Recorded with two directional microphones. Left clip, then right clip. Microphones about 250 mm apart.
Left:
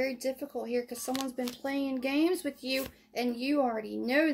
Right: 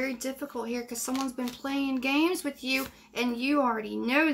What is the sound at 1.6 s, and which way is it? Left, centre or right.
Speech, centre.